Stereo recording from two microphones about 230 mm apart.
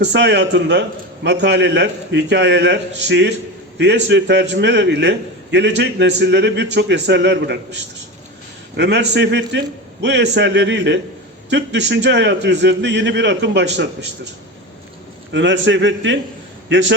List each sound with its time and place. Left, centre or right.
0.0 s a man's voice: right
15.3 s a man's voice: right